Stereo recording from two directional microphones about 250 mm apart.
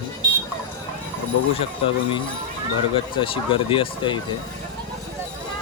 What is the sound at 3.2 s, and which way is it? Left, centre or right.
Speech, left.